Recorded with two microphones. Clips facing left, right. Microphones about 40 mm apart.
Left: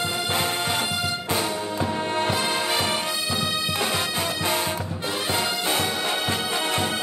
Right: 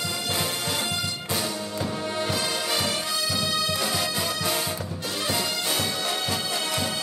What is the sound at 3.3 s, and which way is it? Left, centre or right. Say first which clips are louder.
Music: even; left.